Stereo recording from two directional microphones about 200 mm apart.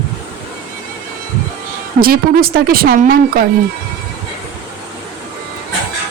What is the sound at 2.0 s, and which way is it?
Speech, 50° right (ahead or behind).